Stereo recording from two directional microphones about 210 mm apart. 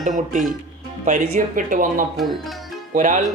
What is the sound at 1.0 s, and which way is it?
Speech, 40° right (ahead or behind).